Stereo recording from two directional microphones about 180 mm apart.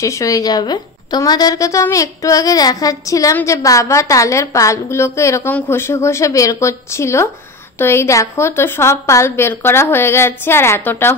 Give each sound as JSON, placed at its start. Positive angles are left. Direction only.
{"t": 0.0, "sound": "a woman's voice", "side_deg": 15}